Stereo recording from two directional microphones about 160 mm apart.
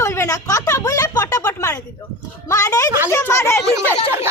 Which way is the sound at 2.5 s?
20° left (ahead or behind).